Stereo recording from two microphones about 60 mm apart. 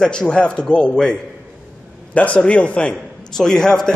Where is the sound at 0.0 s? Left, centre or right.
Centre.